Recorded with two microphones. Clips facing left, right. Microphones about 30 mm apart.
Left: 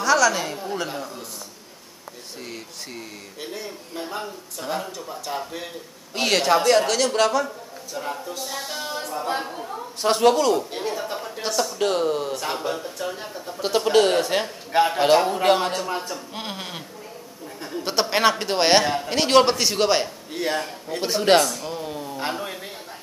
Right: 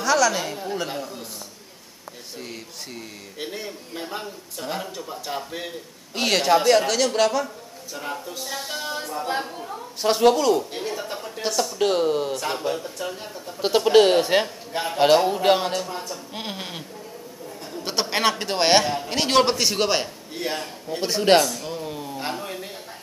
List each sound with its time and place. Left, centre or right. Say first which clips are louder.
0.0 s a woman's voice: left 1 dB; centre
3.3 s a man's voice: right 2 dB; centre
13.1 s a man's voice: left 2 dB; centre
13.6 s a man's voice: right 2 dB; centre
15.9 s a man's voice: left 4 dB; left
16.3 s a man's voice: right 3 dB; centre
17.8 s a man's voice: left 3 dB; centre
20.4 s a man's voice: left 2 dB; centre
21.0 s speech: even; centre
22.2 s speech: left 2 dB; centre